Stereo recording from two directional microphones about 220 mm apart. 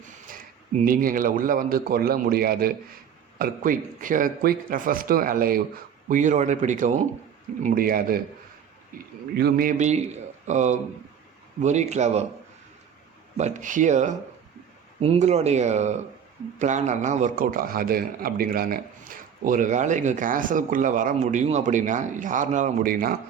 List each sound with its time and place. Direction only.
0.8 s a man's voice: 40° right (ahead or behind)
9.4 s a man's voice: 40° right (ahead or behind)
13.3 s a man's voice: 35° right (ahead or behind)